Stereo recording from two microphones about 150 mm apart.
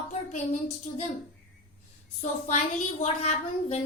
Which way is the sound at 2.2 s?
50° left (ahead or behind).